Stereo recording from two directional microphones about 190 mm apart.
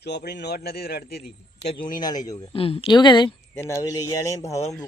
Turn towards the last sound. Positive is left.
turn(degrees=15)  # may be behind; listen again after turning